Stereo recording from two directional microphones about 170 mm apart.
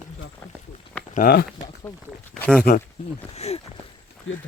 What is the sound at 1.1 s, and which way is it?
Speech, 60° left (ahead or behind).